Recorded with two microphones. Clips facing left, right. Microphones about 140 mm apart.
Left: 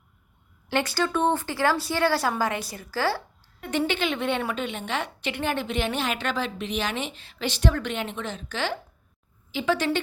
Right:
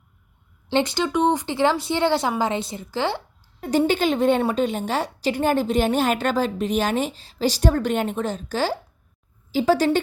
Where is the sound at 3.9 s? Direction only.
40° right (ahead or behind).